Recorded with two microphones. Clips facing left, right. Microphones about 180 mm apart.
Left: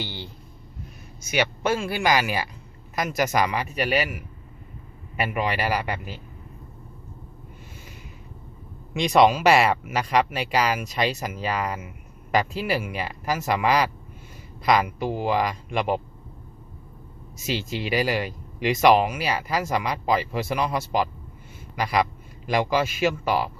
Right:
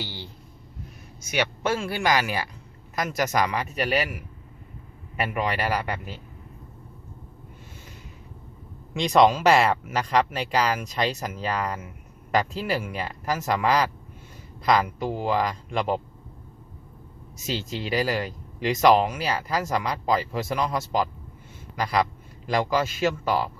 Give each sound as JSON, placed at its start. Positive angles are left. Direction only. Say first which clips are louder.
{"t": 0.0, "sound": "a sound", "louder": "left 2 dB", "side_deg": 60}
{"t": 1.2, "sound": "speech", "louder": "left 2 dB", "side_deg": 10}
{"t": 8.9, "sound": "speech", "louder": "left 1 dB", "side_deg": 10}
{"t": 17.3, "sound": "speech", "louder": "left 2 dB", "side_deg": 10}